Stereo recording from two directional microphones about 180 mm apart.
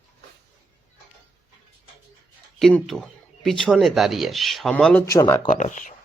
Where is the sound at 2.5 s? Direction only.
Centre (ahead or behind).